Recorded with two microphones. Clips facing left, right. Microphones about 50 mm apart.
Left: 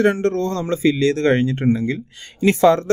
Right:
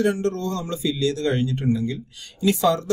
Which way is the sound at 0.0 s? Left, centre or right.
Left.